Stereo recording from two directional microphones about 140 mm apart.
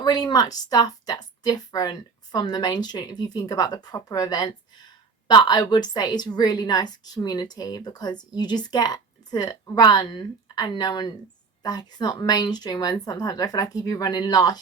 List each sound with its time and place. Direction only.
0.0 s a woman's voice: 30° left (ahead or behind)